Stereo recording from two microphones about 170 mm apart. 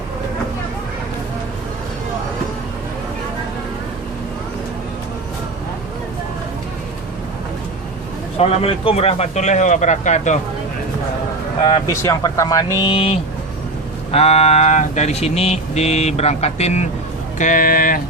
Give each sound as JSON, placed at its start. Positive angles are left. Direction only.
{"t": 8.4, "sound": "a man's voice", "side_deg": 35}
{"t": 11.6, "sound": "speech", "side_deg": 30}
{"t": 12.0, "sound": "speech", "side_deg": 20}
{"t": 17.3, "sound": "speech", "side_deg": 50}